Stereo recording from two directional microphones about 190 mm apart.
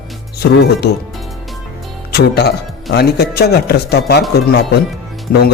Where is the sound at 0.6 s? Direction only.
55° left (ahead or behind).